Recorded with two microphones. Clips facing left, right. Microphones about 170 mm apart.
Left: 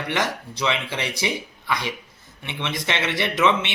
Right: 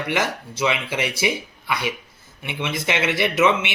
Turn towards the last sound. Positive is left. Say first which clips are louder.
# right 2 dB
turn(degrees=-10)  # may be behind; listen again after turning